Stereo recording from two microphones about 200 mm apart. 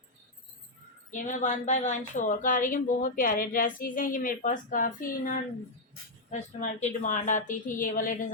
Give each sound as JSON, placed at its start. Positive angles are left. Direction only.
{"t": 1.1, "sound": "a woman's voice", "side_deg": 40}